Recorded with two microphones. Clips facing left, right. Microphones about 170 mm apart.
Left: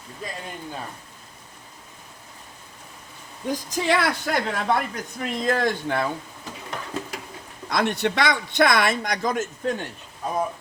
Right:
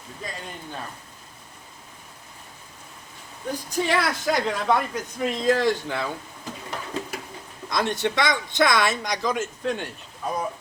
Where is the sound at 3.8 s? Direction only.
75° left (ahead or behind).